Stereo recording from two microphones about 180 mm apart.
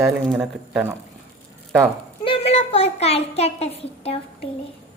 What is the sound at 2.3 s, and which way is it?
A child's voice, 30° left (ahead or behind).